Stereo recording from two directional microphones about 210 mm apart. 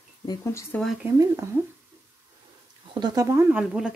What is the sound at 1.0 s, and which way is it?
Speech, 15° right (ahead or behind).